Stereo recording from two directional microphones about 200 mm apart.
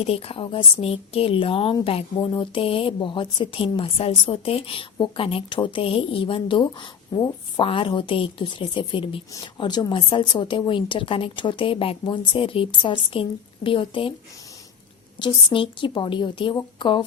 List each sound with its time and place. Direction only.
0.0 s speech: 30° left (ahead or behind)
15.2 s speech: 25° left (ahead or behind)